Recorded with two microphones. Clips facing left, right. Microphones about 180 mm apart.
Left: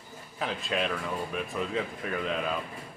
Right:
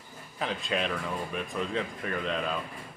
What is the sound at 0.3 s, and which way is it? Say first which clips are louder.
Speech: even; centre (ahead or behind).